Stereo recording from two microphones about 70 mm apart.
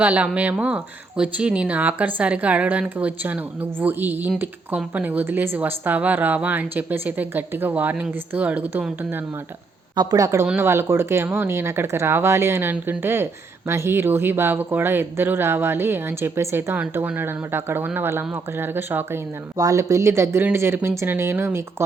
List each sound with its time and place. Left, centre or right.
0.0 s speech: right
9.9 s a woman's voice: right
10.2 s speech: right
10.6 s speech: right
19.5 s speech: right